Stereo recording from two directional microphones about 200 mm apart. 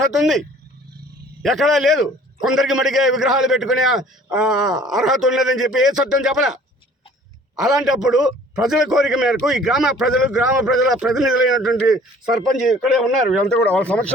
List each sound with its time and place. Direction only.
0.0 s a man's voice: centre (ahead or behind)
4.3 s a sound: 5° right (ahead or behind)
4.6 s speech: 20° right (ahead or behind)
4.9 s a man's voice: centre (ahead or behind)